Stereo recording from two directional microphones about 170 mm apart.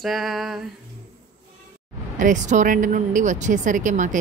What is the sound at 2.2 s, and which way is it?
Speech, 50° right (ahead or behind).